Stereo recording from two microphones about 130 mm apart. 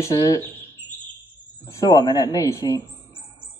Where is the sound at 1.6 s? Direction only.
30° left (ahead or behind).